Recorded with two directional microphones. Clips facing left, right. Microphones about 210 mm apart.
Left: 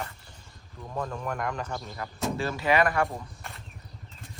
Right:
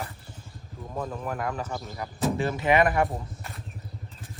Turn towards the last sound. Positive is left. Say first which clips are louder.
# right 3 dB
turn(degrees=0)  # may be behind; listen again after turning